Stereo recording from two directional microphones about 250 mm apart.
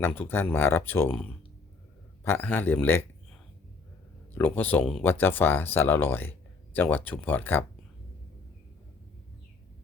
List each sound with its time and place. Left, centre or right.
0.0 s speech: centre
4.4 s speech: centre